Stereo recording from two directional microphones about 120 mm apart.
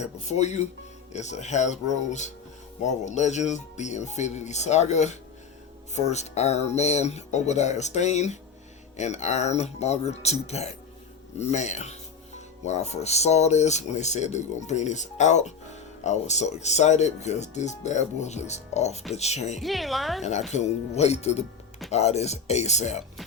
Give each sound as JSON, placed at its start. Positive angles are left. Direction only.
{"t": 0.0, "sound": "speech", "side_deg": 65}
{"t": 19.6, "sound": "speech", "side_deg": 0}
{"t": 20.5, "sound": "speech", "side_deg": 70}